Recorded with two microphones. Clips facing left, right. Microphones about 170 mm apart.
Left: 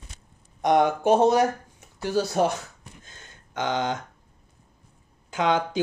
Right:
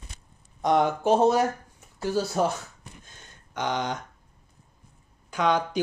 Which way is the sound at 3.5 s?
90° left.